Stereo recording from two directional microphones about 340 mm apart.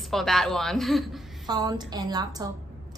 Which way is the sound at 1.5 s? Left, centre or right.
Centre.